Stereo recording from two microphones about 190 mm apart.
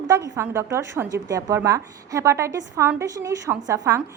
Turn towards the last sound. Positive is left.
turn(degrees=-15)  # may be behind; listen again after turning